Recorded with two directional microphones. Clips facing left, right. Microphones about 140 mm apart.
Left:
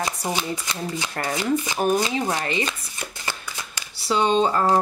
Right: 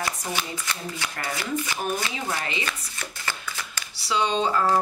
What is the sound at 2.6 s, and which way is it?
Shuffling cards, 20° left (ahead or behind).